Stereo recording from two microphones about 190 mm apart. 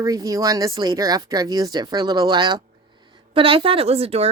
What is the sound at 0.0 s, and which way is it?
Speech, 20° right (ahead or behind).